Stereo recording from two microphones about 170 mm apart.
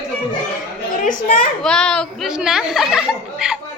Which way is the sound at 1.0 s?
50° left (ahead or behind).